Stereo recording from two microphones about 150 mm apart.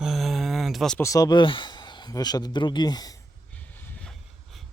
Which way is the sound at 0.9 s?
20° left (ahead or behind).